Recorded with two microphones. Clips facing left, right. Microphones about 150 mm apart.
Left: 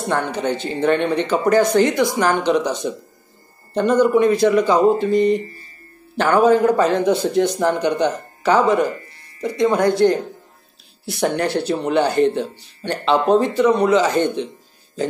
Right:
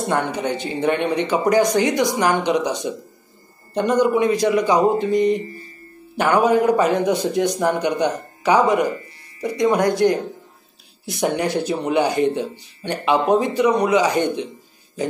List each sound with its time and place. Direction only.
0.1 s a man's voice: 15° right (ahead or behind)